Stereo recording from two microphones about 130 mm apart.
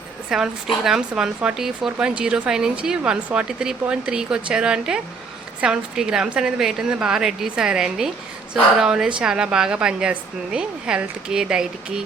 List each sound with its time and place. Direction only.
0.3 s a woman's voice: 5° right (ahead or behind)